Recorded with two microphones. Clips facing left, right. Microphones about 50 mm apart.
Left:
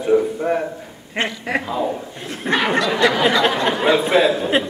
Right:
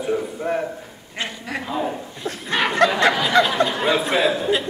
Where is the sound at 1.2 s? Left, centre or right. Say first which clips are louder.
Left 6 dB; left.